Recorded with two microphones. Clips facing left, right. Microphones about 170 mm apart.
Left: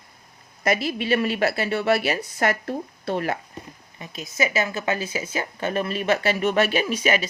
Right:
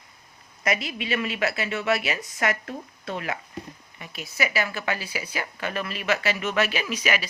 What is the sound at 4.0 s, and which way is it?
Speech, 20° left (ahead or behind).